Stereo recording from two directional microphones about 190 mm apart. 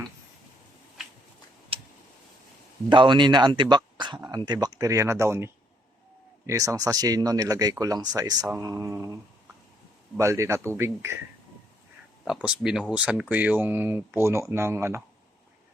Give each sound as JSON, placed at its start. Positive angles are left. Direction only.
{"t": 1.7, "sound": "tick", "side_deg": -30}
{"t": 2.9, "sound": "speech", "side_deg": -25}
{"t": 10.2, "sound": "speech", "side_deg": -15}
{"t": 12.2, "sound": "speech", "side_deg": -5}